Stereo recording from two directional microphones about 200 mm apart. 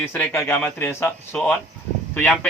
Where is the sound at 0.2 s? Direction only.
10° left (ahead or behind).